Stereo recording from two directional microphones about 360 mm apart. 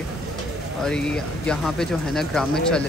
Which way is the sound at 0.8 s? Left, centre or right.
Centre.